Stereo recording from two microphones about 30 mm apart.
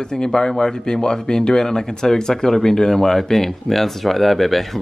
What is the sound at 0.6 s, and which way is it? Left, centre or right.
Speech, centre.